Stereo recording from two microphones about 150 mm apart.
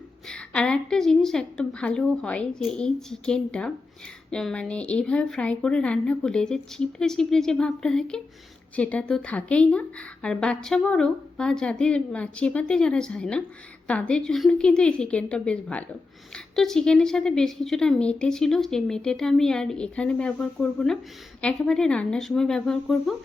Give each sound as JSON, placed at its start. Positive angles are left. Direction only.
{"t": 0.3, "sound": "a woman's voice", "side_deg": 5}